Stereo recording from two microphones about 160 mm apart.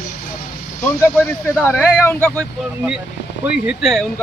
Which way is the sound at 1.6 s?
10° left (ahead or behind).